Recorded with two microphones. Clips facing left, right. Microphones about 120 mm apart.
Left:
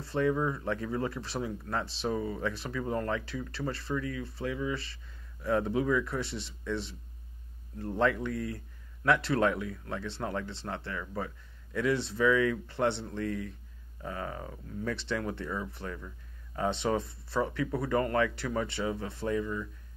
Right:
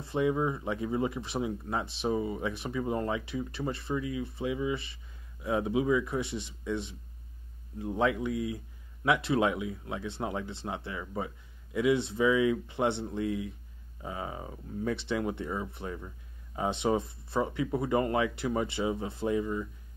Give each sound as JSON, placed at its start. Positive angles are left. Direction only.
{"t": 0.0, "sound": "speech", "side_deg": -15}